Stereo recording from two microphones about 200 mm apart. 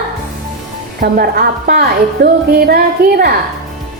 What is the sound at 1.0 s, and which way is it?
A woman's voice, 50° right (ahead or behind).